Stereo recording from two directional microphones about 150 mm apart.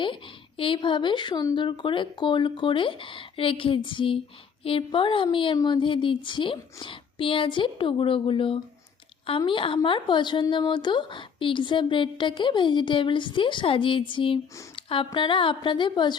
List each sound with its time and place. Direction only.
0.0 s speech: 35° left (ahead or behind)